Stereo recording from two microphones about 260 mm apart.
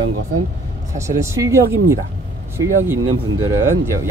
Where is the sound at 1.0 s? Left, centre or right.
Centre.